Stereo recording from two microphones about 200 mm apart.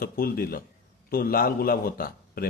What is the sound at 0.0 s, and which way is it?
Speech, 45° left (ahead or behind).